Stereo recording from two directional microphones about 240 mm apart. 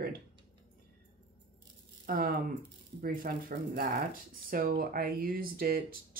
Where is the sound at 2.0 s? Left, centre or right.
Right.